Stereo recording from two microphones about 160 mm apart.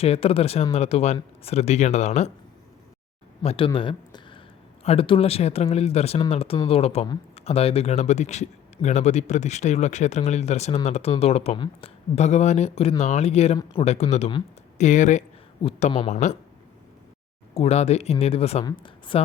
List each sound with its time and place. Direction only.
0.0 s speech: 35° left (ahead or behind)
3.4 s speech: 35° left (ahead or behind)
3.8 s a sound: 30° left (ahead or behind)
4.8 s speech: 40° left (ahead or behind)
11.5 s speech: 30° left (ahead or behind)
12.1 s speech: 45° left (ahead or behind)
14.8 s speech: 50° left (ahead or behind)
15.6 s speech: 35° left (ahead or behind)
17.5 s a woman's voice: 40° left (ahead or behind)